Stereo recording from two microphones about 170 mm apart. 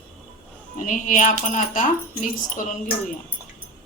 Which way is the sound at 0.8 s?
50° left (ahead or behind).